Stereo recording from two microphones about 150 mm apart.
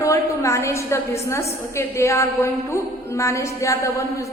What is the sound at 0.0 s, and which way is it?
A woman's voice, 20° left (ahead or behind).